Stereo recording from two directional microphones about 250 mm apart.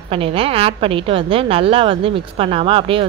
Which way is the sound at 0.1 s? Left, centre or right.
Right.